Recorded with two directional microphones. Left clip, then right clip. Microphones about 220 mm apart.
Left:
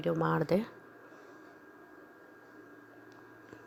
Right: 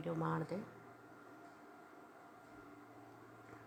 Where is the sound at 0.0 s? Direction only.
30° left (ahead or behind).